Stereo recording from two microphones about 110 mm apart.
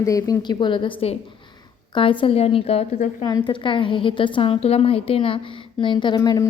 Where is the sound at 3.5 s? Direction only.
50° left (ahead or behind).